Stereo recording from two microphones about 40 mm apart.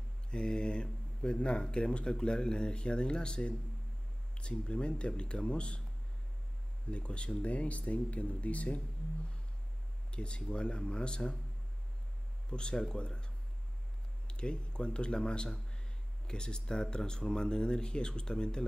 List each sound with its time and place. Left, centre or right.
0.3 s speech: left
6.9 s speech: left
12.4 s speech: left